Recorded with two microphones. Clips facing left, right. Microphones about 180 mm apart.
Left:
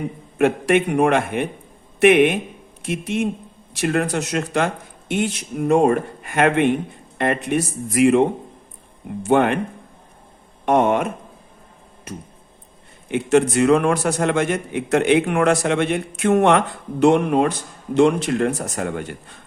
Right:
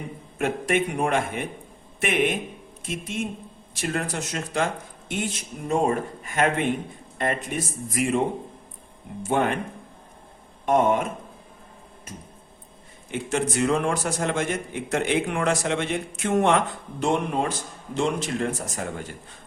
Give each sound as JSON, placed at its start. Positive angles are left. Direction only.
{"t": 0.3, "sound": "a man's voice", "side_deg": 70}
{"t": 9.2, "sound": "a man's voice", "side_deg": 70}
{"t": 10.7, "sound": "a man's voice", "side_deg": 75}
{"t": 12.1, "sound": "a man's voice", "side_deg": 70}